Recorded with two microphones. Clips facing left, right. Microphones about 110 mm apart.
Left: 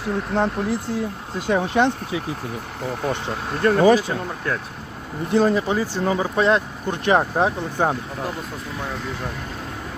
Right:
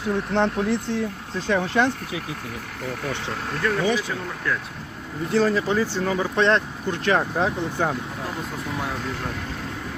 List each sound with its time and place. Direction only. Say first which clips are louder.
0.0 s speech: even; 5° left (ahead or behind)
1.5 s speech: left 2 dB; 20° left (ahead or behind)
3.6 s speech: left 8 dB; 45° left (ahead or behind)
5.3 s speech: left 2 dB; 20° left (ahead or behind)